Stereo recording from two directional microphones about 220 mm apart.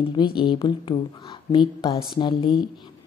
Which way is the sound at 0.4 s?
20° left (ahead or behind).